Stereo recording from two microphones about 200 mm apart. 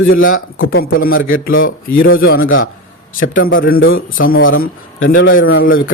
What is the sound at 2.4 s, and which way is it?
Speech, 80° left.